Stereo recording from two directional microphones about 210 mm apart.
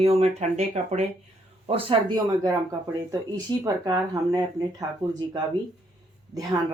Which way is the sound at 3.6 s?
15° right (ahead or behind).